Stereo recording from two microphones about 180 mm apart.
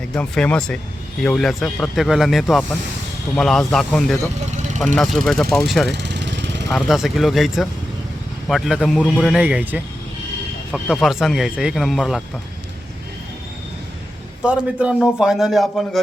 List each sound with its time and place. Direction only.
0.1 s speech: 5° left (ahead or behind)
5.9 s vehicle: 70° right (ahead or behind)
6.7 s speech: centre (ahead or behind)
14.4 s speech: 5° right (ahead or behind)